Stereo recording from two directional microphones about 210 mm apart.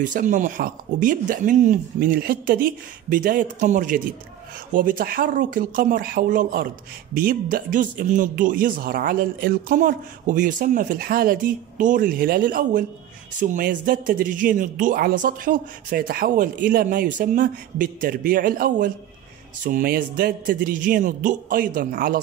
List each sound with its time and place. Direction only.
0.0 s a man's voice: 40° right (ahead or behind)